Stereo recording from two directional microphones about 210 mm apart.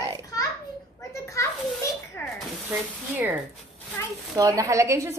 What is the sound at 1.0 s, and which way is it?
Children playing, 15° left (ahead or behind).